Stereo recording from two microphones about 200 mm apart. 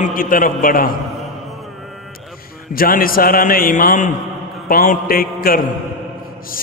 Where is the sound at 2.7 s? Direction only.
45° left (ahead or behind).